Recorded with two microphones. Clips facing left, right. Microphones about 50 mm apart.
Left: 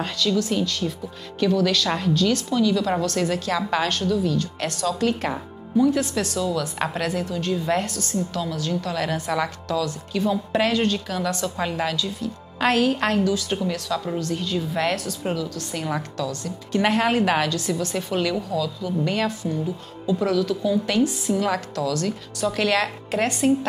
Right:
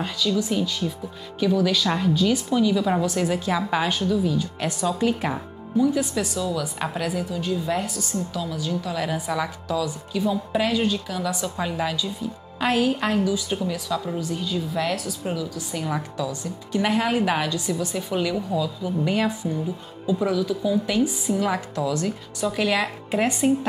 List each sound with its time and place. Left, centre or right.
0.4 s a woman's voice: centre
11.9 s speech: centre
15.3 s a woman's voice: centre
16.0 s speech: centre
17.1 s a woman's voice: centre
18.5 s a woman's voice: right